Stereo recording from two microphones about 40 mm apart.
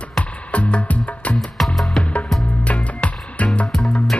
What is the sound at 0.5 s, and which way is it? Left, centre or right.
Music, left.